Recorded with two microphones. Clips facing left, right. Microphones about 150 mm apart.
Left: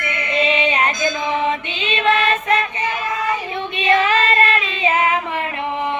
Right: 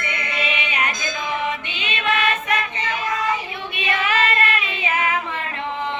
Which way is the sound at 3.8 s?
30° left (ahead or behind).